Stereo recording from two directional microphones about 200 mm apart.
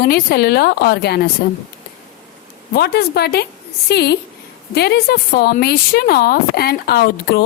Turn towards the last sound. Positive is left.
turn(degrees=50)  # may be behind; listen again after turning